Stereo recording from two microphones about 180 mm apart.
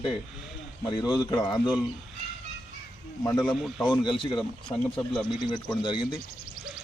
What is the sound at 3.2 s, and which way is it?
Speech, 20° left (ahead or behind).